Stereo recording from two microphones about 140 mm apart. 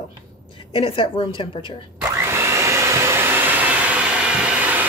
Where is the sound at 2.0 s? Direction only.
20° right (ahead or behind).